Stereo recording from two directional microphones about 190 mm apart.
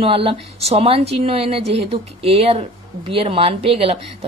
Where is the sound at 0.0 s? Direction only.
30° right (ahead or behind).